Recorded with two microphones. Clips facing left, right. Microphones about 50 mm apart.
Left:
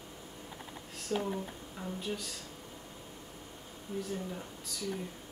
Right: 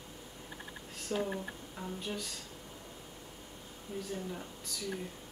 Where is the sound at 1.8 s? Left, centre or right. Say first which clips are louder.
Left 2 dB; centre.